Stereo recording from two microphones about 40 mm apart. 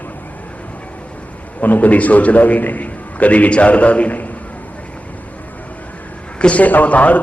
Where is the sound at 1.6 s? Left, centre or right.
Left.